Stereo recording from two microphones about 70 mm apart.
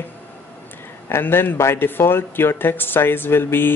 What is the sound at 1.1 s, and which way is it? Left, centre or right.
Speech, left.